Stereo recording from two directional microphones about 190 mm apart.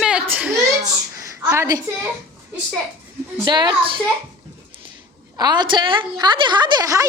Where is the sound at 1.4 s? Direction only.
15° right (ahead or behind).